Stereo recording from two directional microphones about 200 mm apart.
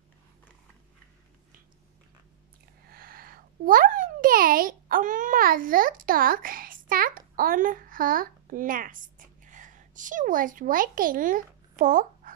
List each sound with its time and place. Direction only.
2.9 s a child's voice: 45° right (ahead or behind)